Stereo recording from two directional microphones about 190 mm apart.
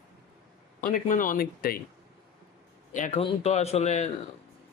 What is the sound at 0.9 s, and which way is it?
Speech, 45° left (ahead or behind).